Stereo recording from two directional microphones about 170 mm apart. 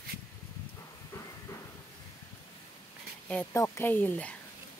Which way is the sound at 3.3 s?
10° left (ahead or behind).